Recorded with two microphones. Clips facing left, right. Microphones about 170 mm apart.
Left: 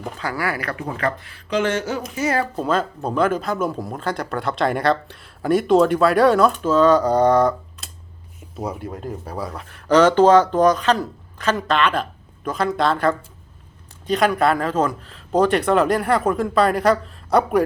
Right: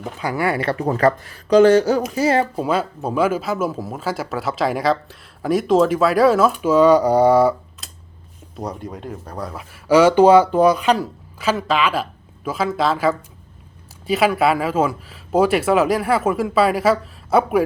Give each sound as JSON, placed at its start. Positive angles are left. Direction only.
{"t": 0.2, "sound": "speech", "side_deg": -20}
{"t": 2.6, "sound": "speech", "side_deg": -10}
{"t": 8.5, "sound": "speech", "side_deg": 5}